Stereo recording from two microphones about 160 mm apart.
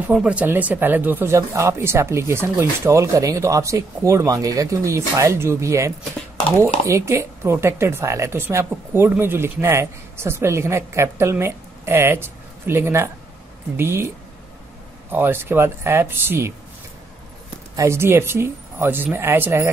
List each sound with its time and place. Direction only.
0.1 s speech: 5° right (ahead or behind)
17.7 s speech: 15° right (ahead or behind)